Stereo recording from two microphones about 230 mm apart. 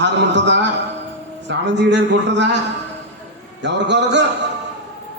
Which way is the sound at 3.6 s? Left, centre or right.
Right.